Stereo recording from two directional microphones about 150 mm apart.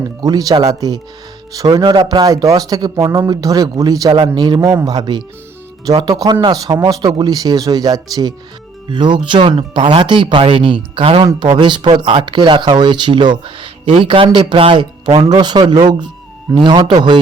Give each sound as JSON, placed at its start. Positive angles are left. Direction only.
{"t": 0.0, "sound": "a man's voice", "side_deg": -25}